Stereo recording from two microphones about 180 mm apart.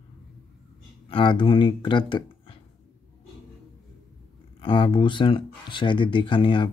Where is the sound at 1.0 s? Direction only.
30° left (ahead or behind).